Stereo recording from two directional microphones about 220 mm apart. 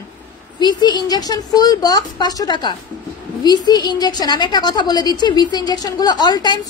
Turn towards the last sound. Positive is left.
turn(degrees=20)  # may be behind; listen again after turning